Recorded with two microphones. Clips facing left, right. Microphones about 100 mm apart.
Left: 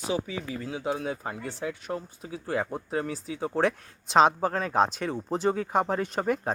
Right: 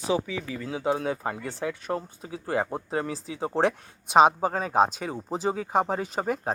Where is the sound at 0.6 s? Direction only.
35° right (ahead or behind).